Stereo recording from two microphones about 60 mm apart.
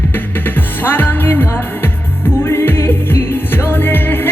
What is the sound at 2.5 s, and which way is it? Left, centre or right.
Music, left.